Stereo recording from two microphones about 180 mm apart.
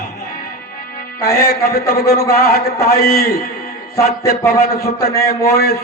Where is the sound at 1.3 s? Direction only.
55° left (ahead or behind).